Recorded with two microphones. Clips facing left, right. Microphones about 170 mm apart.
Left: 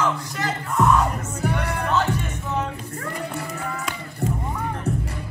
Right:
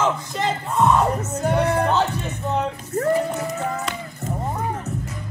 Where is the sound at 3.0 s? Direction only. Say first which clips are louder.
Right 12 dB; 40° right (ahead or behind).